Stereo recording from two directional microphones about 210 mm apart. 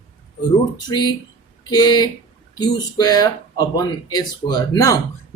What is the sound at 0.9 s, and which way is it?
Speech, 20° left (ahead or behind).